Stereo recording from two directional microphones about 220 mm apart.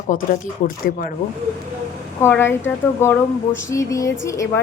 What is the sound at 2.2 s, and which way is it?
A woman's voice, 10° left (ahead or behind).